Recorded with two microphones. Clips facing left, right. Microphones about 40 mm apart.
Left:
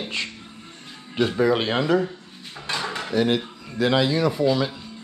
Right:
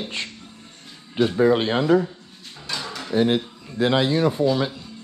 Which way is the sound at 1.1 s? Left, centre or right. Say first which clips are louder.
Right 2 dB; left.